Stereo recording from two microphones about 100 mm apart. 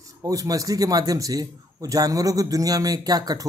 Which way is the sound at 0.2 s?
35° right (ahead or behind).